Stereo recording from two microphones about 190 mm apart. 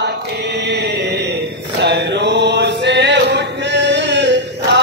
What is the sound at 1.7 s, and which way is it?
Chant, 65° right (ahead or behind).